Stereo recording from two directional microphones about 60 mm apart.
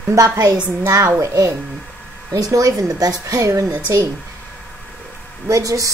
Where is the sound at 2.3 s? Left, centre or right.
Right.